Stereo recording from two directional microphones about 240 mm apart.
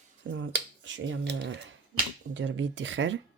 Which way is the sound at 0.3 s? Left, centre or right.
Right.